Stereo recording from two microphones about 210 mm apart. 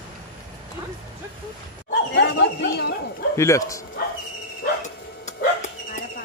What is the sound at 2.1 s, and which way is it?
Speech, 55° left (ahead or behind).